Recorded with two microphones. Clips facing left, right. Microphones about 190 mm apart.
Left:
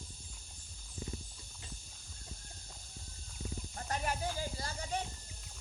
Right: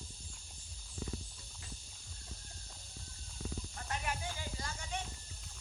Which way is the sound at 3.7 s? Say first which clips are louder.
Left 5 dB; 40° left (ahead or behind).